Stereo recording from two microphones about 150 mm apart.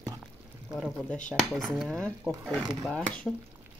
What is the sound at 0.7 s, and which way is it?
Speech, centre (ahead or behind).